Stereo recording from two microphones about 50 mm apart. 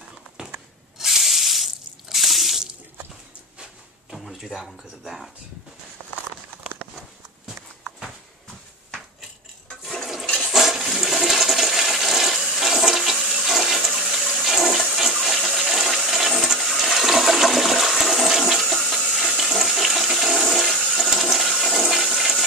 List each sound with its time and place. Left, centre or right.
0.4 s a sound: centre
0.9 s sink: centre
4.1 s a sound: centre
4.6 s speech: centre
10.4 s toilet flush: centre
15.3 s toilet flush: centre
19.1 s toilet flush: centre